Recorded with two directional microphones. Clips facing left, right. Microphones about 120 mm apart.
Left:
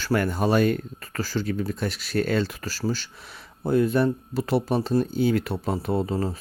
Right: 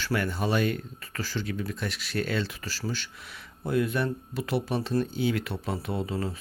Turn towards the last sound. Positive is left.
turn(degrees=40)  # may be behind; listen again after turning